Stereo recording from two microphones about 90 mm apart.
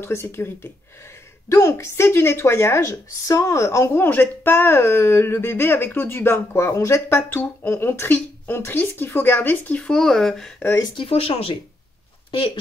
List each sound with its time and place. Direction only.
0.0 s a woman's voice: 30° left (ahead or behind); by 10.5 s 5° left (ahead or behind)
11.0 s speech: 90° left